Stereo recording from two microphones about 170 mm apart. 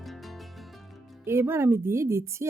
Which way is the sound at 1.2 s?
15° right (ahead or behind).